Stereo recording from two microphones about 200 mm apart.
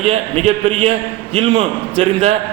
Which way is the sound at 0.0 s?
30° right (ahead or behind).